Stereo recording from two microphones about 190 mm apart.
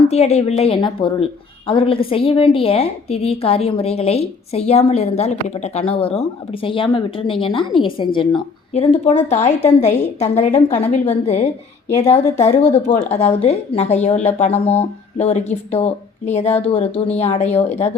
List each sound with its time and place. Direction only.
0.1 s a woman's voice: 35° left (ahead or behind)